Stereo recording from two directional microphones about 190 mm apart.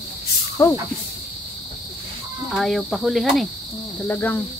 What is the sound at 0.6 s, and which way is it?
Speech, 15° left (ahead or behind).